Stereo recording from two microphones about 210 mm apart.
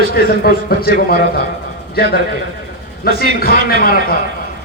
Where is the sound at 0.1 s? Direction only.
45° left (ahead or behind).